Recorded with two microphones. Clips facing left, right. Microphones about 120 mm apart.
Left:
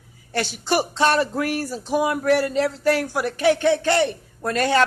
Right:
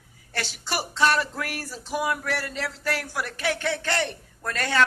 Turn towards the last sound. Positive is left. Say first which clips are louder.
# left 7 dB
turn(degrees=25)  # may be behind; listen again after turning